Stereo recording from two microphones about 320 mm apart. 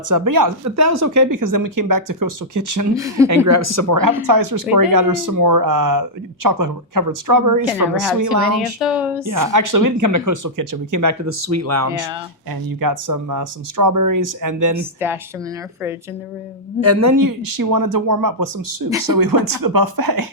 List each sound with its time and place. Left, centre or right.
0.1 s speech: right
2.9 s a woman's voice: centre
3.4 s speech: right
7.9 s speech: right
8.5 s speech: centre
9.2 s speech: right
12.8 s speech: right
14.8 s a woman's voice: centre
16.8 s speech: right